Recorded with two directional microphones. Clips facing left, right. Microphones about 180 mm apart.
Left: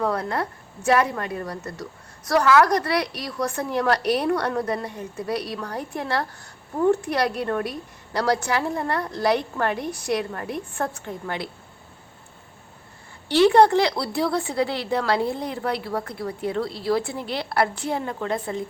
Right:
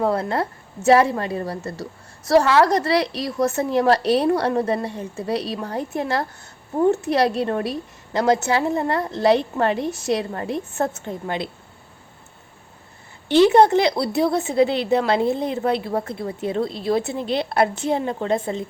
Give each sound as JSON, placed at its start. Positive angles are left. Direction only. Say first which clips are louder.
{"t": 0.0, "sound": "a woman's voice", "louder": "right 3 dB", "side_deg": -25}
{"t": 13.2, "sound": "a woman's voice", "louder": "right 2 dB", "side_deg": -20}